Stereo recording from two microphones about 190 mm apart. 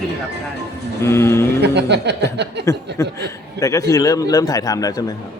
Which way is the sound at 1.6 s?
60° right (ahead or behind).